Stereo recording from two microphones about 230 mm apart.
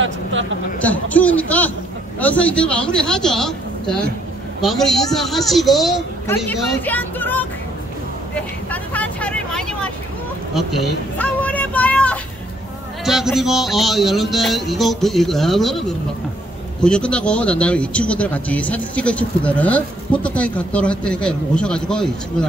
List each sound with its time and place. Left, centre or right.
0.0 s speech: right
0.8 s a woman's voice: centre
8.4 s vehicle: centre
10.5 s a sound: centre
13.0 s speech: centre
16.8 s speech: centre